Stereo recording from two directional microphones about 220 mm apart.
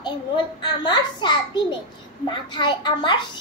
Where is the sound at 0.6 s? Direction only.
20° left (ahead or behind).